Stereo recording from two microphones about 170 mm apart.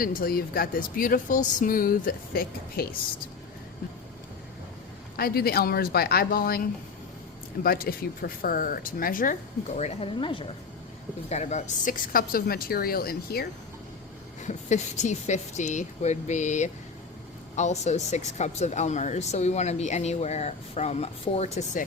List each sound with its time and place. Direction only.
0.0 s speech: 60° left (ahead or behind)
5.1 s speech: 65° left (ahead or behind)
7.6 s speech: 60° left (ahead or behind); by 10.5 s 30° left (ahead or behind)
11.3 s speech: 40° left (ahead or behind); by 13.5 s 65° left (ahead or behind)
14.4 s speech: 45° left (ahead or behind)